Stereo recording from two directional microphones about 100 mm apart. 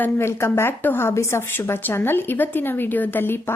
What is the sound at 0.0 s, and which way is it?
A woman's voice, 25° left (ahead or behind).